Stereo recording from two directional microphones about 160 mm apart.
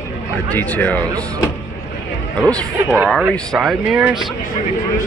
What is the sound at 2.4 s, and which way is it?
Speech, 5° left (ahead or behind).